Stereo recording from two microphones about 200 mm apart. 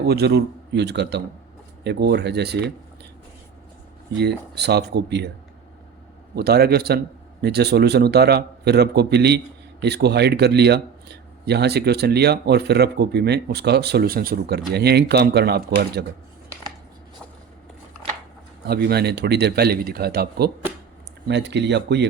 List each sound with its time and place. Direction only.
0.0 s speech: 55° right (ahead or behind)
4.2 s speech: 55° right (ahead or behind)
6.3 s speech: 55° right (ahead or behind)
18.6 s speech: 55° right (ahead or behind)